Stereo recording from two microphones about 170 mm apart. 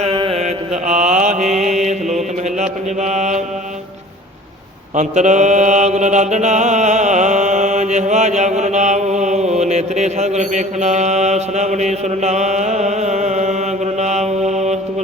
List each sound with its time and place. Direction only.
0.0 s mantra: 30° right (ahead or behind)
0.3 s mantra: 45° right (ahead or behind)
4.9 s mantra: 45° right (ahead or behind)